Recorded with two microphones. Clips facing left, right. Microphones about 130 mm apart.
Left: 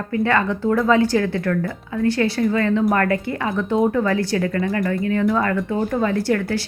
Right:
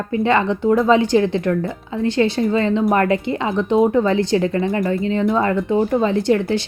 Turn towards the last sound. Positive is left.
turn(degrees=-20)  # may be behind; listen again after turning